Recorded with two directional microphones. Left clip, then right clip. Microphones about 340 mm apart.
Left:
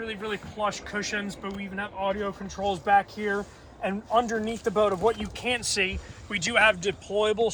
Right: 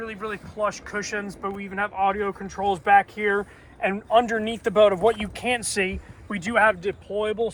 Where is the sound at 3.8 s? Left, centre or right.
Right.